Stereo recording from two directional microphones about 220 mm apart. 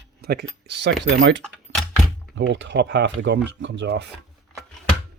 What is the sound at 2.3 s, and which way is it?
Speech, 55° right (ahead or behind).